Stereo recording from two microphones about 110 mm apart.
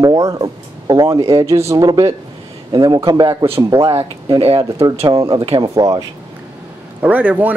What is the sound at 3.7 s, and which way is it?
Speech, 25° right (ahead or behind).